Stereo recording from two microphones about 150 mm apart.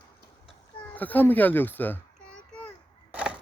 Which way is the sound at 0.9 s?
10° left (ahead or behind).